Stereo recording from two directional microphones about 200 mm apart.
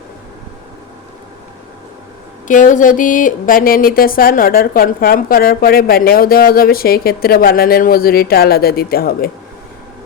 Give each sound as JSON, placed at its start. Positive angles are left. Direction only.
{"t": 2.5, "sound": "speech", "side_deg": 40}